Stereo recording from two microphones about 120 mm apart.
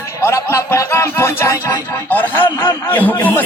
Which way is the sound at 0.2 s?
25° left (ahead or behind).